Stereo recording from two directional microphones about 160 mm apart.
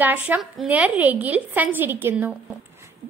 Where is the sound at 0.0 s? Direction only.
10° right (ahead or behind).